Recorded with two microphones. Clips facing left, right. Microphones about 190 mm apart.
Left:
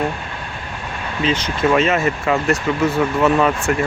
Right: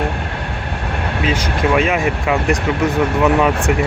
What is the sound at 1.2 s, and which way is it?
Speech, 10° right (ahead or behind).